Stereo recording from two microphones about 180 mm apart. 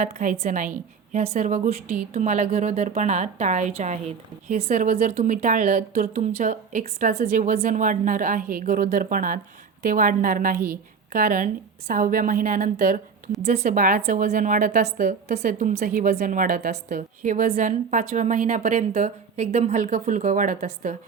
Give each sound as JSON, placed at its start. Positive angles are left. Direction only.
{"t": 0.0, "sound": "a woman's voice", "side_deg": -40}
{"t": 5.1, "sound": "a woman's voice", "side_deg": -40}
{"t": 13.4, "sound": "a woman's voice", "side_deg": -35}
{"t": 13.7, "sound": "a woman's voice", "side_deg": -50}